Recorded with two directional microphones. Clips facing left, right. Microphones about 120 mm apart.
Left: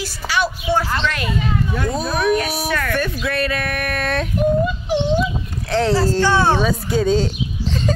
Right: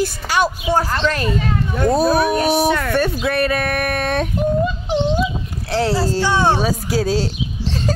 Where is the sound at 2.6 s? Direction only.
20° right (ahead or behind).